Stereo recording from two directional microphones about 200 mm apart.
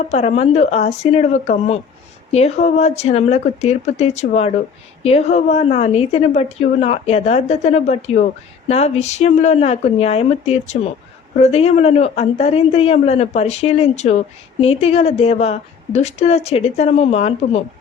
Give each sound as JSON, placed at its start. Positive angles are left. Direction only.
{"t": 0.1, "sound": "a woman's voice", "side_deg": 35}